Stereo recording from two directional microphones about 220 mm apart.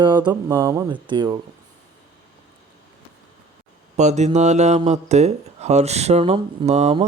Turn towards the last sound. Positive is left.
turn(degrees=-30)  # may be behind; listen again after turning